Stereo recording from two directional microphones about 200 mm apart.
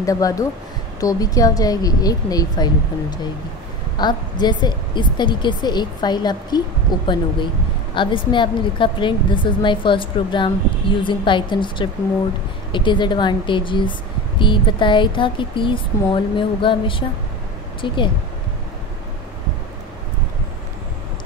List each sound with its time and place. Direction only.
0.0 s a woman's voice: 15° left (ahead or behind)